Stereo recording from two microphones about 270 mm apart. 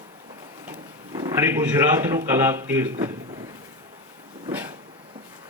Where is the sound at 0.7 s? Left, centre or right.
Centre.